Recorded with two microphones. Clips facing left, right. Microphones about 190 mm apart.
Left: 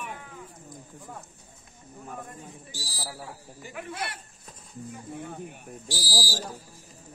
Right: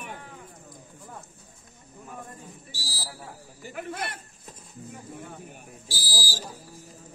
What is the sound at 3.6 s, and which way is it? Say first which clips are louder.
Speech: right 2 dB; 45° right (ahead or behind).